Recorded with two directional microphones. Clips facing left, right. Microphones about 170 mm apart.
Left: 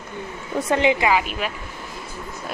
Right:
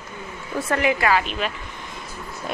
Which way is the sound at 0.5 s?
20° left (ahead or behind).